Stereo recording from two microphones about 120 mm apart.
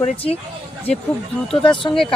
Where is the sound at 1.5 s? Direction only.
45° left (ahead or behind).